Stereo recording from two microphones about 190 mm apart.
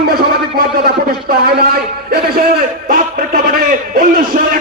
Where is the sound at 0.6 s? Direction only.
55° right (ahead or behind).